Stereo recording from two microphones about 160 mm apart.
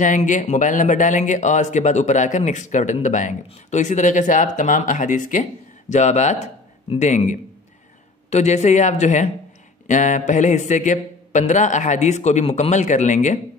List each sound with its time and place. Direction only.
0.0 s speech: 55° left (ahead or behind)